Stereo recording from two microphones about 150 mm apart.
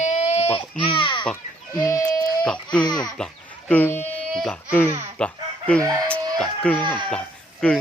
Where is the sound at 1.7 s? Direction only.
25° left (ahead or behind).